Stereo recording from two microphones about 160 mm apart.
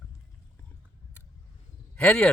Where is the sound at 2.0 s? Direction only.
10° left (ahead or behind).